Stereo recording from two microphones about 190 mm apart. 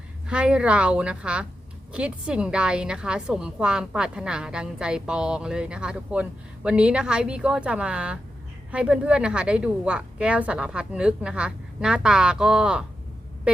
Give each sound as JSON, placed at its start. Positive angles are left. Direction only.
{"t": 0.3, "sound": "a woman's voice", "side_deg": -5}